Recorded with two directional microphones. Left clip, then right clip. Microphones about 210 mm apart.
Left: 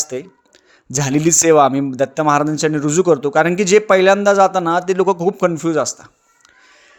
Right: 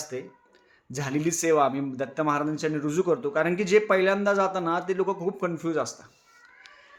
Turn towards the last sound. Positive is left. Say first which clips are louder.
# left 10 dB
turn(degrees=45)  # may be behind; listen again after turning